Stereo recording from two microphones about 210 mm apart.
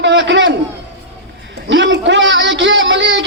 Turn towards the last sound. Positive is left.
turn(degrees=-60)  # may be behind; listen again after turning